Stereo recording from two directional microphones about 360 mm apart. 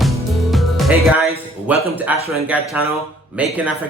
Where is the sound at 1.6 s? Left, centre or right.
Centre.